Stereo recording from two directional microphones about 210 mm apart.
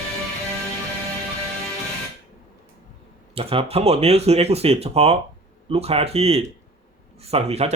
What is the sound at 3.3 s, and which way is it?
Speech, 25° right (ahead or behind).